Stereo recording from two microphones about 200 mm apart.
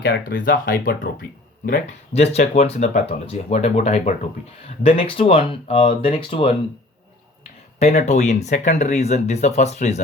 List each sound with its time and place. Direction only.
0.0 s speech: 45° left (ahead or behind); by 6.5 s 25° left (ahead or behind)
7.8 s speech: 35° left (ahead or behind)